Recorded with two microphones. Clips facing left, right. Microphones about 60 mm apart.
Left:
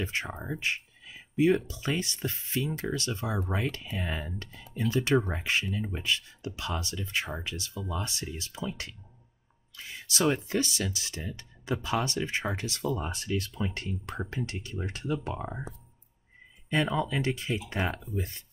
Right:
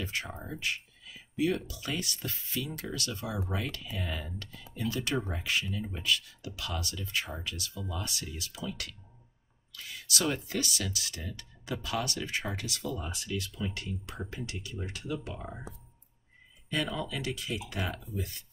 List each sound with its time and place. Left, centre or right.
0.0 s speech: left
16.7 s speech: left